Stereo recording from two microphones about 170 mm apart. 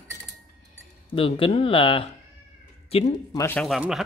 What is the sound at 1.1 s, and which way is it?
Speech, 30° left (ahead or behind).